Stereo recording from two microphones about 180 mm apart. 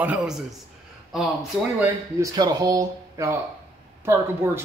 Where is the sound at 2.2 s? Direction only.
20° right (ahead or behind).